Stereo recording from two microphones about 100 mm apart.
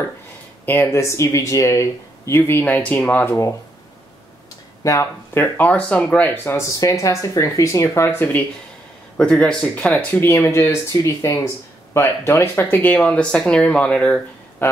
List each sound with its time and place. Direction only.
0.7 s speech: 25° left (ahead or behind)
4.8 s speech: 35° left (ahead or behind)
5.3 s speech: 20° left (ahead or behind)
10.3 s speech: 30° left (ahead or behind); by 14.2 s 10° left (ahead or behind)
14.6 s speech: 20° left (ahead or behind)